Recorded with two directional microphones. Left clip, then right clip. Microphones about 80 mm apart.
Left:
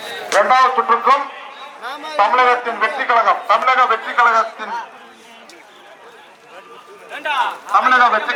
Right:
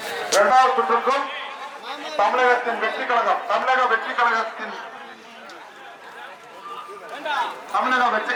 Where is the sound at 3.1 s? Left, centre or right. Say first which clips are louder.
Left 7 dB; left.